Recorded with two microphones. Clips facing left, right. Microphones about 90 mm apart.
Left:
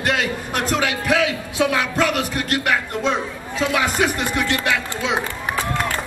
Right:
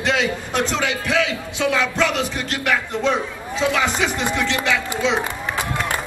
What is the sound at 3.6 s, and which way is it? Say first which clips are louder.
Speech: even; 5° left (ahead or behind).